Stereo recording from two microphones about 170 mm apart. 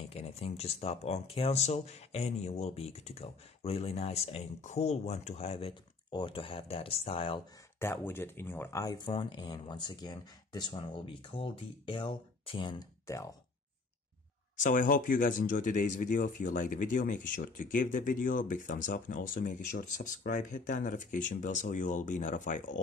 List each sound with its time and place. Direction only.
0.1 s speech: 35° left (ahead or behind)
7.8 s speech: 15° left (ahead or behind)
14.6 s speech: 50° left (ahead or behind)